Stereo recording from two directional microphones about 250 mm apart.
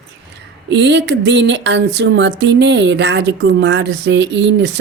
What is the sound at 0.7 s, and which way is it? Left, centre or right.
Speech, right.